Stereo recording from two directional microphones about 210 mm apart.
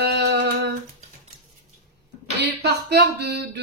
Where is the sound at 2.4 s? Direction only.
55° right (ahead or behind).